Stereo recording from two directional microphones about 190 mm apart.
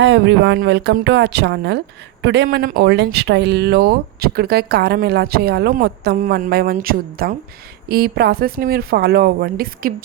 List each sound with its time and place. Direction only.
0.0 s speech: 70° right (ahead or behind); by 9.9 s 55° right (ahead or behind)